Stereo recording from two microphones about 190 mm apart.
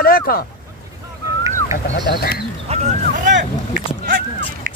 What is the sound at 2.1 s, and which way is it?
Speech, 55° left (ahead or behind).